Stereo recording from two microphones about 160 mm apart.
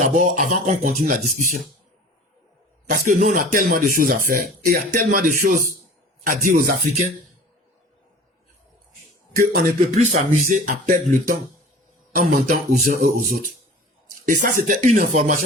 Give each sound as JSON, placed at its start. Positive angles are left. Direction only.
{"t": 0.0, "sound": "speech", "side_deg": -55}
{"t": 2.9, "sound": "speech", "side_deg": -55}
{"t": 9.4, "sound": "speech", "side_deg": -50}
{"t": 12.1, "sound": "speech", "side_deg": -55}
{"t": 14.3, "sound": "speech", "side_deg": -55}